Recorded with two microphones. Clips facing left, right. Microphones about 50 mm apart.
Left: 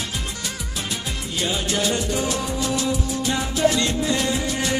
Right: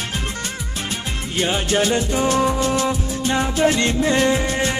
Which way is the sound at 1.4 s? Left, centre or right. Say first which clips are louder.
Right 5 dB; right.